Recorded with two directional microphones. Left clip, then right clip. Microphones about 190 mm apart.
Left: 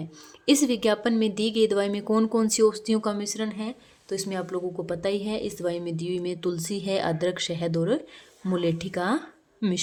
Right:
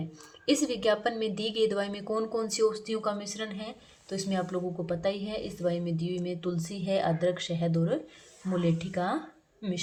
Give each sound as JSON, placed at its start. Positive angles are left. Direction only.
{"t": 0.4, "sound": "a woman's voice", "side_deg": 30}